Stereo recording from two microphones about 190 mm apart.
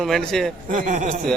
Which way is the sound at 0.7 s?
45° right (ahead or behind).